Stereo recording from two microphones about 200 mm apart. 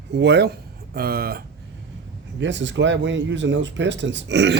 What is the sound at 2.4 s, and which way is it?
Speech, 65° right (ahead or behind).